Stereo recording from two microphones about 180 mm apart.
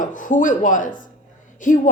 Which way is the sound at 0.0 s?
45° left (ahead or behind).